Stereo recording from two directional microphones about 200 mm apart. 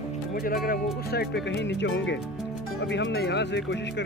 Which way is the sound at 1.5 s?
60° left (ahead or behind).